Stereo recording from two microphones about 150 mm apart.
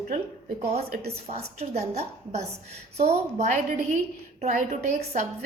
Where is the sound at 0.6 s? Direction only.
45° right (ahead or behind).